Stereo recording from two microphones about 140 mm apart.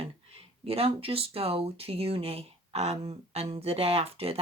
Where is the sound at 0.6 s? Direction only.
45° right (ahead or behind).